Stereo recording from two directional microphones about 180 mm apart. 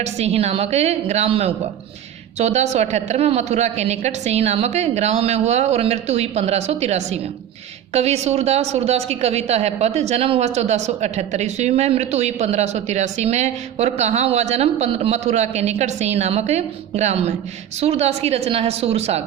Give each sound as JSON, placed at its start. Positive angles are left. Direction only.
{"t": 0.0, "sound": "a woman's voice", "side_deg": -35}